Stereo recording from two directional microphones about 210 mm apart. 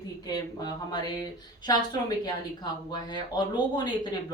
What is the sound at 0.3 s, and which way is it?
A woman's voice, 20° left (ahead or behind).